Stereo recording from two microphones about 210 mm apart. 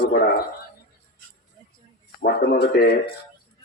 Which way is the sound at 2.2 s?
50° left (ahead or behind).